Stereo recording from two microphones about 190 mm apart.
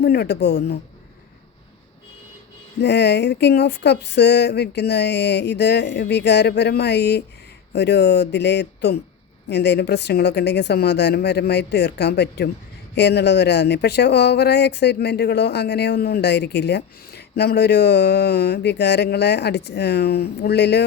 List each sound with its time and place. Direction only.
0.0 s speech: 60° left (ahead or behind)
2.8 s speech: 65° left (ahead or behind)